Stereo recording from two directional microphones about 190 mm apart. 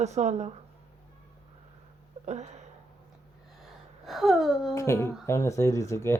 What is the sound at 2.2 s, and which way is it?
Speech, 35° right (ahead or behind).